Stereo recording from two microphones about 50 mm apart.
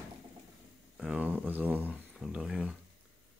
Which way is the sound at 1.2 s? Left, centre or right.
Right.